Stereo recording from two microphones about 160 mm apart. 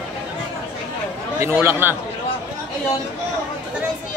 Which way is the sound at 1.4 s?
15° right (ahead or behind).